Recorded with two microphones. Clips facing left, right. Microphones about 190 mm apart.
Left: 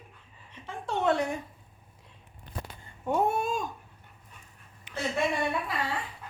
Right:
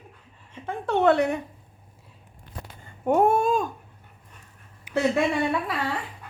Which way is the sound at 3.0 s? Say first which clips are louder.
Right 7 dB; 50° right (ahead or behind).